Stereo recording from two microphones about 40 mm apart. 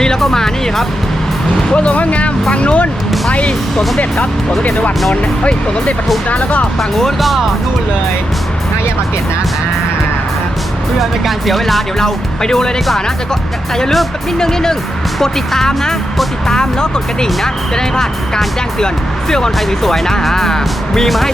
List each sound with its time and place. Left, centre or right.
0.2 s music: centre
1.7 s speech: left
6.3 s speech: left
6.9 s speech: centre
11.0 s speech: centre
14.3 s speech: centre
19.5 s speech: centre